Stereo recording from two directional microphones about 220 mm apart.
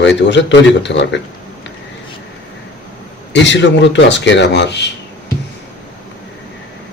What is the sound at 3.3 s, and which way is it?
Speech, 55° left (ahead or behind).